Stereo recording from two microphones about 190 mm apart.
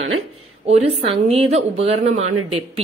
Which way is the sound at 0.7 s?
35° right (ahead or behind).